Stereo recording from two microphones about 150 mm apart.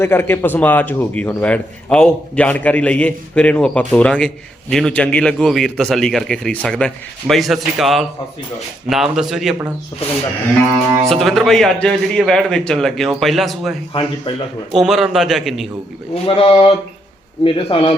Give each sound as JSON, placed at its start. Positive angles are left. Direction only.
{"t": 0.0, "sound": "a man's voice", "side_deg": 15}
{"t": 11.1, "sound": "a man's voice", "side_deg": 0}
{"t": 14.3, "sound": "speech", "side_deg": 35}
{"t": 14.7, "sound": "a man's voice", "side_deg": 0}
{"t": 16.1, "sound": "speech", "side_deg": 35}